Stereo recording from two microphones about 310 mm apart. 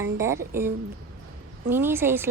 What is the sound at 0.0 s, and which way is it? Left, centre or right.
Speech, centre.